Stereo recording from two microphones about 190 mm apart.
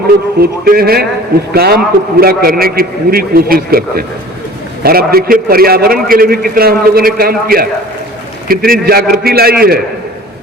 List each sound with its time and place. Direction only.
0.3 s a man's voice: 50° right (ahead or behind)